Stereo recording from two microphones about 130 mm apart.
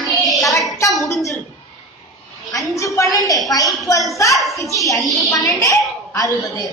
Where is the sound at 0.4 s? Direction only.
25° left (ahead or behind).